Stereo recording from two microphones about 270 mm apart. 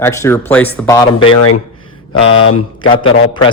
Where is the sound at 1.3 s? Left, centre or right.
Left.